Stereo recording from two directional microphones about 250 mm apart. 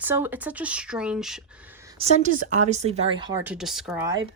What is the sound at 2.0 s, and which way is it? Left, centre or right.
Speech, right.